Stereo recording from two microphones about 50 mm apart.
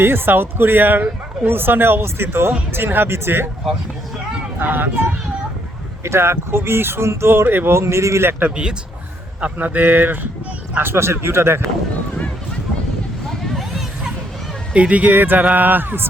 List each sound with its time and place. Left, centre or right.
0.0 s speech: right
4.5 s speech: right
6.0 s speech: right
7.4 s speech: right
7.7 s speech: right
8.4 s speech: right
9.4 s speech: right
10.8 s speech: right
13.4 s a sound: centre
14.7 s speech: right